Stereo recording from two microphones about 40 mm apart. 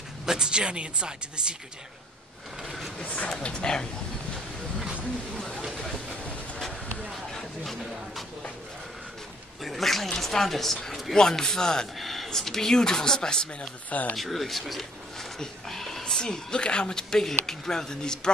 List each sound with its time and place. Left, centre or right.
0.3 s speech: centre
3.0 s speech: left
3.3 s speech: left
5.7 s train: centre
7.1 s a sound: centre
9.6 s speech: centre
12.0 s a sound: centre
12.3 s speech: centre
13.8 s speech: left
14.1 s speech: centre; by 17.0 s left
17.1 s speech: centre